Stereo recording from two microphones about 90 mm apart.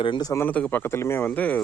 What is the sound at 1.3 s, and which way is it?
Speech, 15° left (ahead or behind).